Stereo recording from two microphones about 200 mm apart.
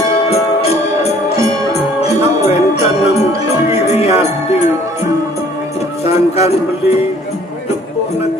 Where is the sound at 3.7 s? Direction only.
30° left (ahead or behind).